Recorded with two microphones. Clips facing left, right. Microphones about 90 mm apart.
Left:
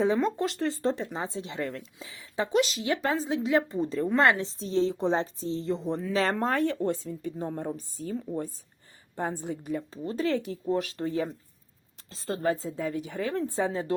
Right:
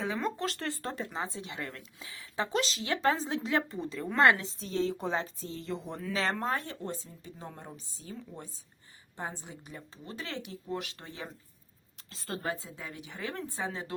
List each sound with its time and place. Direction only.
0.2 s a woman's voice: 20° left (ahead or behind)
3.8 s a woman's voice: 35° left (ahead or behind)
6.8 s a woman's voice: 55° left (ahead or behind)
9.9 s a woman's voice: 40° left (ahead or behind)